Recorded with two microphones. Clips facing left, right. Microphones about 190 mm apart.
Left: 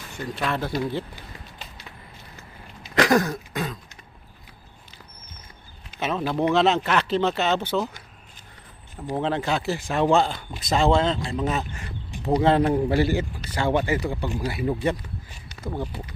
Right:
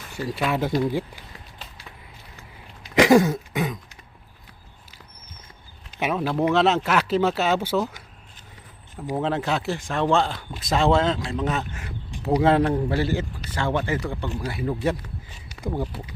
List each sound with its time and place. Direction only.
0.2 s speech: 5° right (ahead or behind)
2.9 s throat clearing: 15° right (ahead or behind)
6.0 s speech: 10° right (ahead or behind)
12.7 s speech: 15° left (ahead or behind)
15.6 s speech: 5° right (ahead or behind)